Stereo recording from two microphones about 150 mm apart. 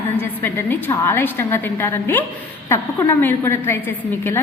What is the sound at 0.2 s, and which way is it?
A woman's voice, 15° left (ahead or behind).